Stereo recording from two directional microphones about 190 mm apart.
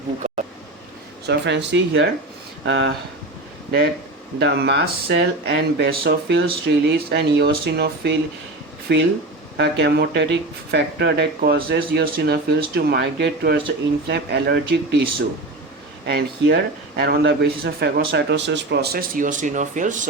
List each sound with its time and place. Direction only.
0.2 s a sound: 40° right (ahead or behind)
1.3 s speech: 70° right (ahead or behind)
4.4 s speech: 60° right (ahead or behind)
16.0 s speech: 65° right (ahead or behind); by 20.1 s 40° right (ahead or behind)